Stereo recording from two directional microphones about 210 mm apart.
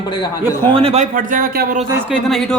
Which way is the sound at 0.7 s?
25° right (ahead or behind).